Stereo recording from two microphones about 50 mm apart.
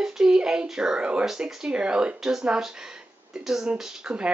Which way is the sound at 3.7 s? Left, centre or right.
Right.